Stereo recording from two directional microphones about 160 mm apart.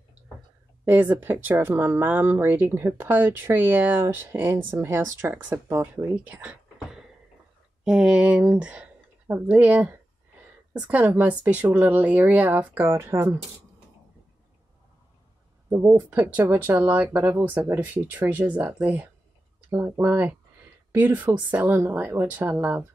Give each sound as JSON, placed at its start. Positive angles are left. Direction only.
{"t": 0.8, "sound": "speech", "side_deg": -10}
{"t": 15.7, "sound": "speech", "side_deg": -15}